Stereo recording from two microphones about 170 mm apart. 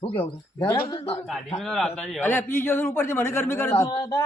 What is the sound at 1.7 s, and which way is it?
A man's voice, 5° left (ahead or behind).